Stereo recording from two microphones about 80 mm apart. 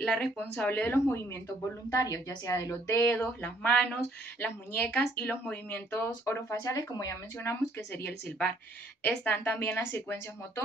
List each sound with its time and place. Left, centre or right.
0.0 s speech: centre
0.7 s speech: left
1.9 s a woman's voice: left
3.2 s speech: centre
5.9 s speech: left
6.7 s a woman's voice: left
7.3 s speech: left